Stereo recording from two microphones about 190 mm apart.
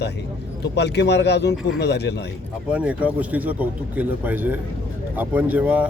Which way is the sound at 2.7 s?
5° right (ahead or behind).